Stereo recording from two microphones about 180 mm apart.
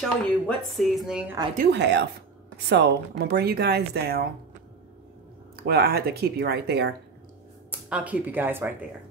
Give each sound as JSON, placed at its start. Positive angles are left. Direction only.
{"t": 0.0, "sound": "speech", "side_deg": 0}
{"t": 1.6, "sound": "speech", "side_deg": -70}
{"t": 5.6, "sound": "speech", "side_deg": -60}
{"t": 7.9, "sound": "speech", "side_deg": -10}